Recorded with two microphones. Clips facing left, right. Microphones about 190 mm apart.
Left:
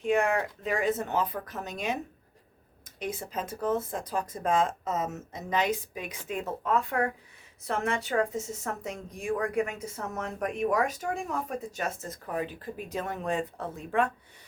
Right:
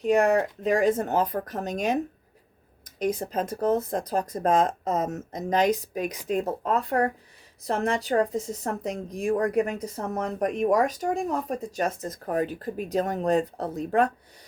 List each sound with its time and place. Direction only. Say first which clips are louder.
0.0 s speech: right 5 dB; 40° right (ahead or behind)
3.0 s speech: right 8 dB; 40° right (ahead or behind)